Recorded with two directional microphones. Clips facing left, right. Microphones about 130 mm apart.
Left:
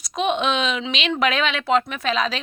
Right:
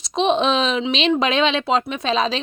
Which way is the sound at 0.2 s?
30° right (ahead or behind).